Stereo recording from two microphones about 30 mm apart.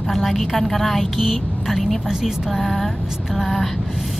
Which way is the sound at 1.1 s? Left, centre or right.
Centre.